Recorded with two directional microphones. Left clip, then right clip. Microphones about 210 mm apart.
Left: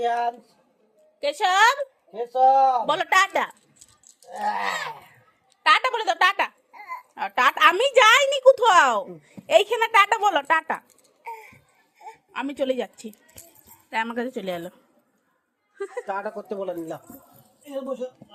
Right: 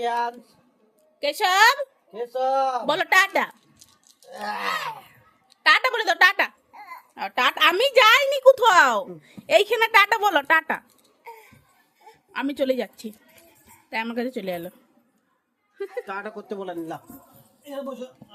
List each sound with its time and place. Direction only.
0.0 s a woman's voice: 10° right (ahead or behind)
2.1 s speech: centre (ahead or behind)
2.8 s a woman's voice: 20° right (ahead or behind)
4.3 s speech: centre (ahead or behind)
5.6 s a woman's voice: 25° right (ahead or behind)
6.7 s babbling: centre (ahead or behind)
7.1 s a woman's voice: 10° right (ahead or behind)
11.3 s cough: centre (ahead or behind)
12.3 s a woman's voice: 15° right (ahead or behind)
15.8 s a woman's voice: 10° right (ahead or behind)